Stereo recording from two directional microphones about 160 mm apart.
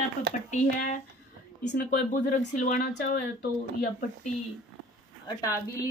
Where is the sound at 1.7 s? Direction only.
70° left (ahead or behind); by 2.8 s 50° left (ahead or behind).